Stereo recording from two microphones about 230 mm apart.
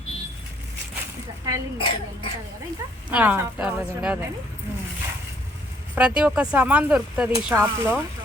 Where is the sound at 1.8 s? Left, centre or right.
Left.